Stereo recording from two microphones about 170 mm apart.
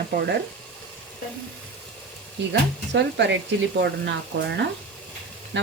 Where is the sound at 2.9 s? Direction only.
90° right.